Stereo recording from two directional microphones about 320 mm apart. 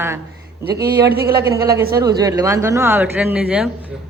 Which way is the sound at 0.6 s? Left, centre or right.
Right.